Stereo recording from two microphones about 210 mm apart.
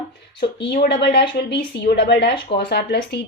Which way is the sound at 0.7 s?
50° left (ahead or behind).